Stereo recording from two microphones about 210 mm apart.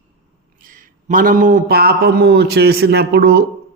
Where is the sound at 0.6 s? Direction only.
40° right (ahead or behind).